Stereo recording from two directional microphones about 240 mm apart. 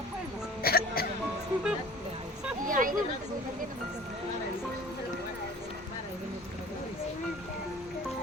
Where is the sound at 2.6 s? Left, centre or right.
Right.